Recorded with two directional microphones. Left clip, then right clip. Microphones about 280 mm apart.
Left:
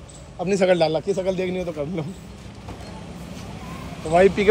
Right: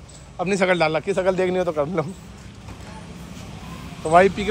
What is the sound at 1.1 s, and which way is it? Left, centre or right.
Speech, centre.